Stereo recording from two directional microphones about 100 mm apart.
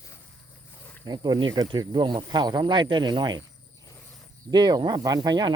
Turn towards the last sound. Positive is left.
turn(degrees=-45)  # may be behind; listen again after turning